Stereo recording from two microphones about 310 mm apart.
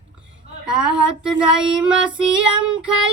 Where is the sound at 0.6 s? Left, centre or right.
Centre.